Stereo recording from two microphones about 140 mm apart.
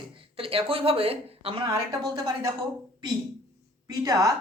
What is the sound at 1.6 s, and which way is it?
Speech, 20° right (ahead or behind).